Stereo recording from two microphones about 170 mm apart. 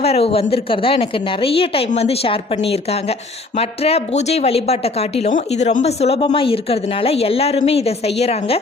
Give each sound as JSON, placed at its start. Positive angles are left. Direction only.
{"t": 0.0, "sound": "speech", "side_deg": 35}